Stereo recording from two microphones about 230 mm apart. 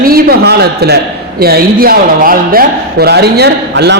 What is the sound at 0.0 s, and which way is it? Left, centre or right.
A man's voice, right.